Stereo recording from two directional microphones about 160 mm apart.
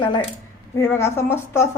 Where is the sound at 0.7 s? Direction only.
15° left (ahead or behind).